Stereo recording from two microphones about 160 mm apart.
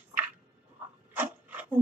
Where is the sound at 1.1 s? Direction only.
10° right (ahead or behind).